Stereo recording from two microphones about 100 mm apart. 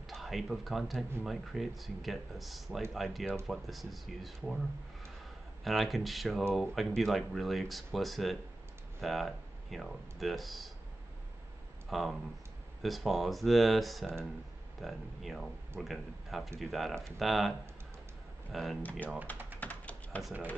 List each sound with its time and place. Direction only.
0.0 s speech: centre (ahead or behind)
5.6 s speech: centre (ahead or behind)
11.9 s speech: centre (ahead or behind)
18.5 s speech: centre (ahead or behind)
18.8 s speech: 15° left (ahead or behind)
19.6 s typing: 15° left (ahead or behind)